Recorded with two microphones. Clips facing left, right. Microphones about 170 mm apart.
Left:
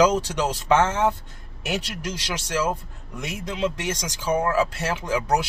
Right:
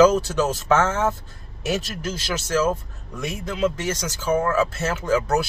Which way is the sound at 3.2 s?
20° left (ahead or behind).